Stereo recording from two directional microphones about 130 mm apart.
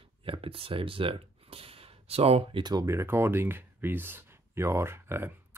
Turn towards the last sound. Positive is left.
turn(degrees=-20)  # may be behind; listen again after turning